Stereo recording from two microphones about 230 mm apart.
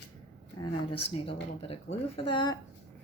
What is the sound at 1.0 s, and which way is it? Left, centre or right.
Speech, left.